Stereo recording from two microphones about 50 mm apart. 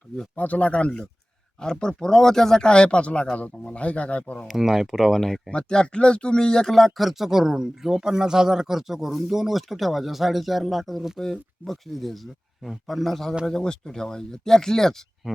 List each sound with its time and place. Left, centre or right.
0.3 s speech: left
4.4 s speech: centre
5.5 s speech: centre
13.5 s speech: centre